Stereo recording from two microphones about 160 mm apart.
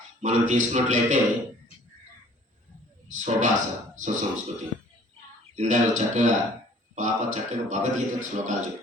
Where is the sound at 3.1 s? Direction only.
50° right (ahead or behind).